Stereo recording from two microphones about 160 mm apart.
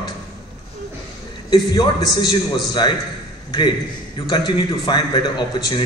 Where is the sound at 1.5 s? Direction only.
30° left (ahead or behind).